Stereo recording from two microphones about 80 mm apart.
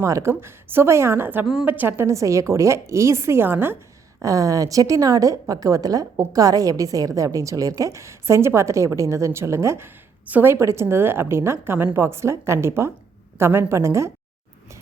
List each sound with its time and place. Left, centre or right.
0.0 s a woman's voice: right
4.2 s a woman's voice: right
10.2 s a woman's voice: right
10.5 s a woman's voice: right